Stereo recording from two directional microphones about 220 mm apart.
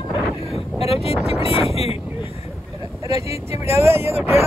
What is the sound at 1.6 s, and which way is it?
Speech, 25° left (ahead or behind).